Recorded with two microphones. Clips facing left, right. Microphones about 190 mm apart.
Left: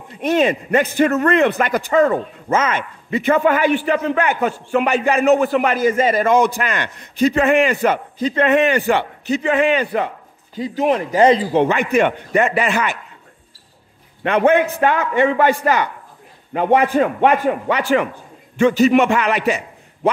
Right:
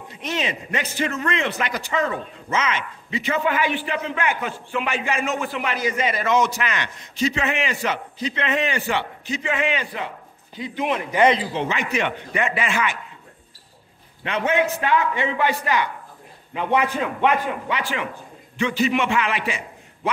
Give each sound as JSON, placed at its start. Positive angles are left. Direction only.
{"t": 0.2, "sound": "a man's voice", "side_deg": 50}
{"t": 11.5, "sound": "a man's voice", "side_deg": 55}
{"t": 14.2, "sound": "a man's voice", "side_deg": 55}